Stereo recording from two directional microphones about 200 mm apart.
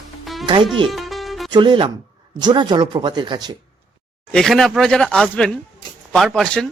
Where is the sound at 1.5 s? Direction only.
25° right (ahead or behind).